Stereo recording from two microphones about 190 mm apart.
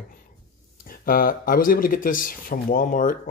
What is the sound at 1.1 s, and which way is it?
Speech, 50° left (ahead or behind).